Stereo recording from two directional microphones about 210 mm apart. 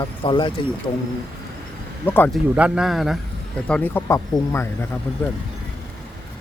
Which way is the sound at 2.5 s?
5° right (ahead or behind).